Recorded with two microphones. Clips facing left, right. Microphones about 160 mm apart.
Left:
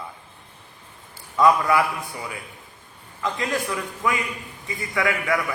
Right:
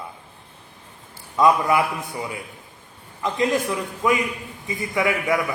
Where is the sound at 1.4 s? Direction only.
20° right (ahead or behind).